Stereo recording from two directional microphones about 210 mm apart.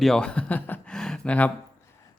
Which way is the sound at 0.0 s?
5° left (ahead or behind).